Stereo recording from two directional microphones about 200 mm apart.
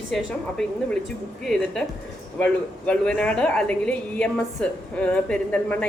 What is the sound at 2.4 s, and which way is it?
A woman's voice, 5° left (ahead or behind).